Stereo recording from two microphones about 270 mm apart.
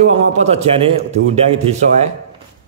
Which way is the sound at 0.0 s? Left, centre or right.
Right.